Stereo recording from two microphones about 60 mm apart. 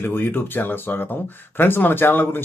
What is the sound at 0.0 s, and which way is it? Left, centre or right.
Speech, left.